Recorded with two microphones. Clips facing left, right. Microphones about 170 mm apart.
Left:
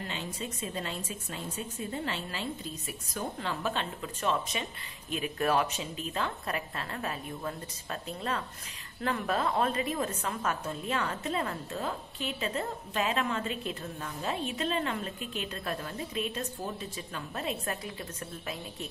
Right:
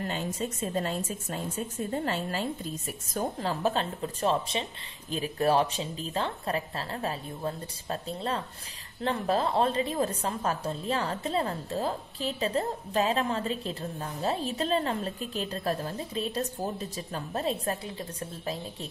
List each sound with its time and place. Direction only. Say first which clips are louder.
0.0 s a woman's voice: right 6 dB; 45° right (ahead or behind)